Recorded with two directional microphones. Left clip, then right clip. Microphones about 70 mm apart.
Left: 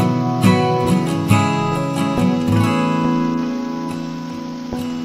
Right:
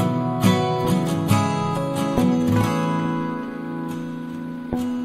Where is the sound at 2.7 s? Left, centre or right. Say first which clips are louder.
Left 5 dB; left.